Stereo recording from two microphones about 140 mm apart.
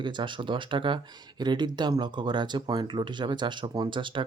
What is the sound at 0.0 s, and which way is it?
Speech, 35° right (ahead or behind).